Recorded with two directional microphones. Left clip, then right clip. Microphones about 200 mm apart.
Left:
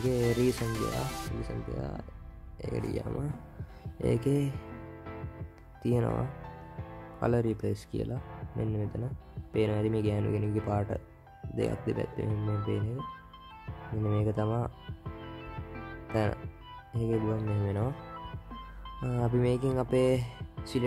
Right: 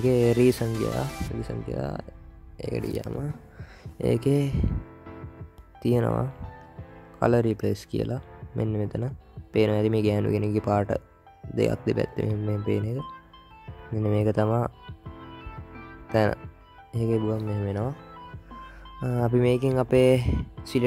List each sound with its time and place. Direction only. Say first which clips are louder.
0.1 s speech: right 8 dB; 30° right (ahead or behind)
5.8 s speech: right 6 dB; 25° right (ahead or behind)
14.0 s speech: right 8 dB; 30° right (ahead or behind)
14.9 s music: right 1 dB; centre (ahead or behind)
16.1 s speech: right 8 dB; 30° right (ahead or behind)
18.9 s speech: right 6 dB; 25° right (ahead or behind)